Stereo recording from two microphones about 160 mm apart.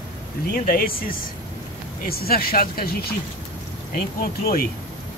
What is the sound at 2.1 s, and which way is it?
Speech, 70° left (ahead or behind).